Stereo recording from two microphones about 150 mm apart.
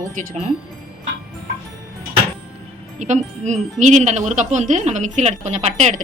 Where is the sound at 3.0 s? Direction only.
50° right (ahead or behind).